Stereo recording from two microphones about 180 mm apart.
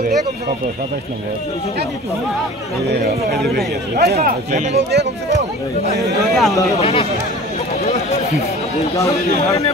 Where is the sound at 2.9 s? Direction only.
65° right (ahead or behind); by 4.7 s 40° right (ahead or behind).